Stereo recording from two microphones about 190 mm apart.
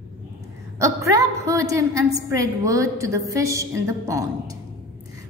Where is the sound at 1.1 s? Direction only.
15° right (ahead or behind).